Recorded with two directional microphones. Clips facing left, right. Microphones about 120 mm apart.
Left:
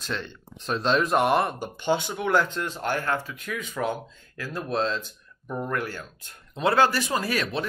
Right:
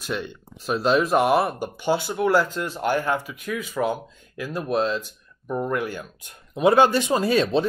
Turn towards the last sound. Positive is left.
turn(degrees=-25)  # may be behind; listen again after turning